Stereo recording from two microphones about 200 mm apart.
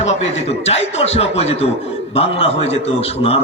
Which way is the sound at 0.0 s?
35° left (ahead or behind).